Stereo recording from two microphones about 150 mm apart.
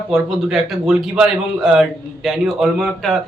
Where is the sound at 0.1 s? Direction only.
Centre (ahead or behind).